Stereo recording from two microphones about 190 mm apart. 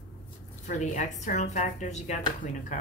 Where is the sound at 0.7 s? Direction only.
40° left (ahead or behind).